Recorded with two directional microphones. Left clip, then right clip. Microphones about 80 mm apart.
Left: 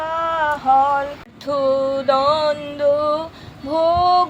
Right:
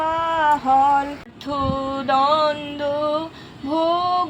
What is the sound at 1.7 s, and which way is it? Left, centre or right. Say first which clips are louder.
Music: left 1 dB; left.